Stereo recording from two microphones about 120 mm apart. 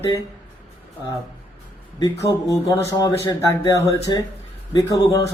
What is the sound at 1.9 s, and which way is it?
Speech, 30° left (ahead or behind).